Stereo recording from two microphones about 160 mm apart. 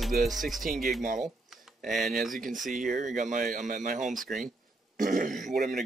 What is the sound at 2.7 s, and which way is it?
Speech, 55° right (ahead or behind).